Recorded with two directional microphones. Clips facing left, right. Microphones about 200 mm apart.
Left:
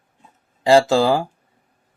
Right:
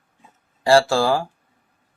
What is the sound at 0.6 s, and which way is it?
Speech, 20° left (ahead or behind).